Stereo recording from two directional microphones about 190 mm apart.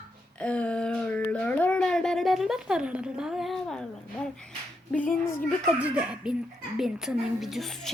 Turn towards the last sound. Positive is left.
turn(degrees=0)  # may be behind; listen again after turning